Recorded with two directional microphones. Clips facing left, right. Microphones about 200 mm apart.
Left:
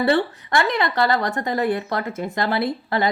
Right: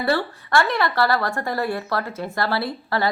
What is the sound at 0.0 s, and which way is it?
A woman's voice, 20° left (ahead or behind).